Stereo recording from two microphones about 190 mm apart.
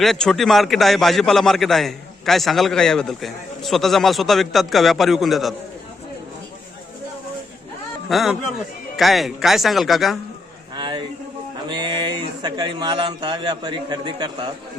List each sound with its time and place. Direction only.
0.0 s a man's voice: centre (ahead or behind)
8.1 s a man's voice: centre (ahead or behind)
10.8 s a sound: 25° right (ahead or behind)
11.7 s a man's voice: 25° right (ahead or behind)